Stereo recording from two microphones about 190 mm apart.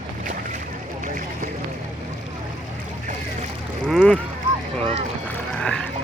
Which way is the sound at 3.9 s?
5° left (ahead or behind).